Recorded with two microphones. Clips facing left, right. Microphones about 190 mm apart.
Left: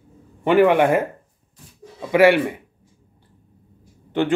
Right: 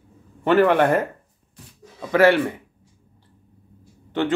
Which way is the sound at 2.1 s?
15° left (ahead or behind).